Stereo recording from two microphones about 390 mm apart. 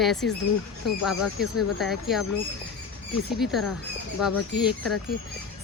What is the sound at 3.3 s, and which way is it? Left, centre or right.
Speech, centre.